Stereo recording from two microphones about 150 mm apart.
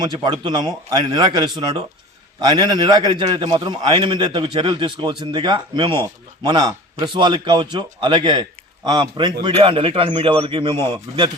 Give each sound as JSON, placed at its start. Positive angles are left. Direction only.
{"t": 0.0, "sound": "a man's voice", "side_deg": -30}